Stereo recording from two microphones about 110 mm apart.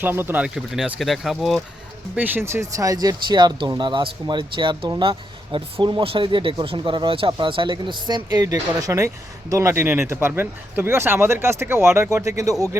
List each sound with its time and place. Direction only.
0.0 s speech: 20° right (ahead or behind)
0.4 s speech: 5° right (ahead or behind)
2.1 s speech: 15° right (ahead or behind)